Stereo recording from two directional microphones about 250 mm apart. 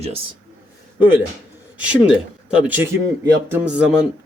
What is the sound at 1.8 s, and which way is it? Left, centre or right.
Speech, centre.